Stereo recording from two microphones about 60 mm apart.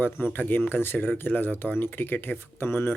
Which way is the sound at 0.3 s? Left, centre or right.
Left.